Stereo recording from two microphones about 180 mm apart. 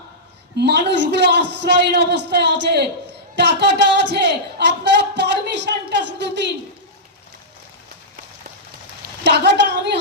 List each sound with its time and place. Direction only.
0.5 s a man's voice: 70° right (ahead or behind)
9.2 s a woman's voice: 70° right (ahead or behind)